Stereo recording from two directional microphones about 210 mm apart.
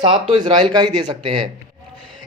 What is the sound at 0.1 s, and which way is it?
Speech, 25° right (ahead or behind).